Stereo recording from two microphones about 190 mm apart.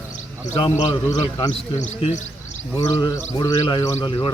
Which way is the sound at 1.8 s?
35° left (ahead or behind).